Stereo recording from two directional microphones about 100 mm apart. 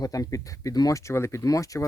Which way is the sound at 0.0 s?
35° left (ahead or behind).